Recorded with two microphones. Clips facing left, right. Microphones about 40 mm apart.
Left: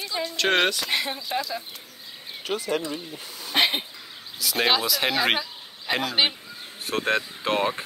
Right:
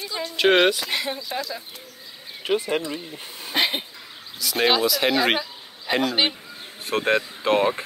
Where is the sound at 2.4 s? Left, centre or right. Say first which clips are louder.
Right 4 dB; right.